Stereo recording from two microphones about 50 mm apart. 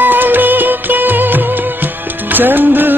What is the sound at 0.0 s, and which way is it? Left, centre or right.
Music of bollywood, right.